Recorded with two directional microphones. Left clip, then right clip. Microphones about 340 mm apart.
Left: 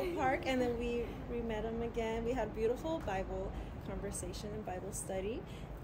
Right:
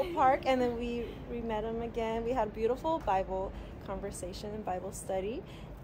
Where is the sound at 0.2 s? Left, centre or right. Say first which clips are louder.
Right 8 dB; centre.